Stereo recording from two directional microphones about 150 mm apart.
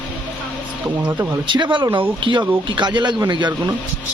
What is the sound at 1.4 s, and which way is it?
Speech, 30° right (ahead or behind).